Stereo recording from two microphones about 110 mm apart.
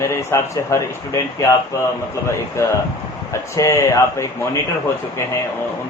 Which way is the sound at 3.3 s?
25° left (ahead or behind).